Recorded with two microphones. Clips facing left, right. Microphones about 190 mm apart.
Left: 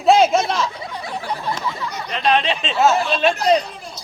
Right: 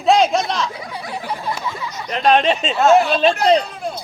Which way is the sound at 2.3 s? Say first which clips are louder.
Right 5 dB; 45° right (ahead or behind).